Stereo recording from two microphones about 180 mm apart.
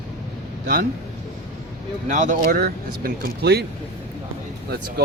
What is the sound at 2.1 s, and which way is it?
Speech, 45° right (ahead or behind).